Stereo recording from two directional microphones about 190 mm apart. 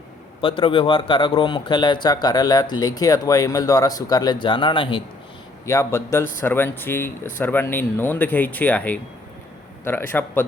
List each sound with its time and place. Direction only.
0.4 s speech: 30° left (ahead or behind)
5.6 s speech: 15° left (ahead or behind)